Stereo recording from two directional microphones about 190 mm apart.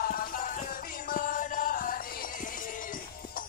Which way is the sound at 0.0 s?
45° left (ahead or behind).